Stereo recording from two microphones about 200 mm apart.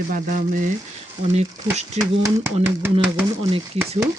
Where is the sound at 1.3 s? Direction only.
35° right (ahead or behind).